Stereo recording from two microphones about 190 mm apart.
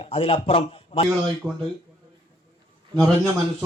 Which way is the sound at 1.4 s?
10° right (ahead or behind).